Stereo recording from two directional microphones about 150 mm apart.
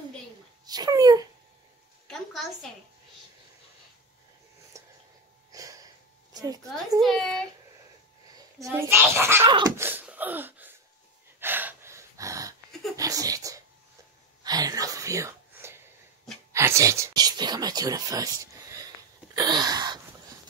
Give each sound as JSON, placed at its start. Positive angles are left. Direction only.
{"t": 0.7, "sound": "a woman's voice", "side_deg": -25}
{"t": 4.7, "sound": "a sound", "side_deg": -20}
{"t": 5.5, "sound": "sniff", "side_deg": -25}
{"t": 6.3, "sound": "a woman's voice", "side_deg": -25}
{"t": 7.0, "sound": "speech", "side_deg": 0}
{"t": 8.7, "sound": "a child's voice", "side_deg": -15}
{"t": 9.4, "sound": "a woman's voice", "side_deg": -30}
{"t": 9.8, "sound": "a sound", "side_deg": -15}
{"t": 11.3, "sound": "gasp", "side_deg": -15}
{"t": 12.9, "sound": "a sound", "side_deg": -25}
{"t": 16.5, "sound": "speech", "side_deg": -20}
{"t": 19.3, "sound": "sneeze", "side_deg": -25}